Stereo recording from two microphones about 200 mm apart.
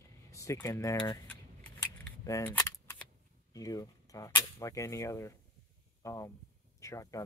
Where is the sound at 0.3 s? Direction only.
15° left (ahead or behind).